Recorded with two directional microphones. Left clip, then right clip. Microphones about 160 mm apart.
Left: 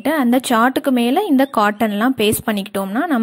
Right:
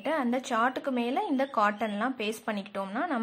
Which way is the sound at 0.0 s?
50° left (ahead or behind).